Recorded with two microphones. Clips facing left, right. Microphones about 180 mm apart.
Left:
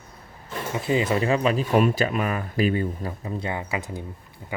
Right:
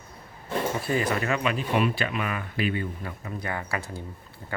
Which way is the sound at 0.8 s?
20° left (ahead or behind).